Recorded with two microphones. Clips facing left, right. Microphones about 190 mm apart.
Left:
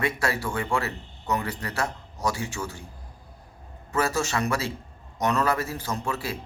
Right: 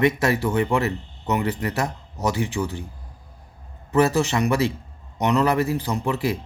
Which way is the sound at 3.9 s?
20° right (ahead or behind).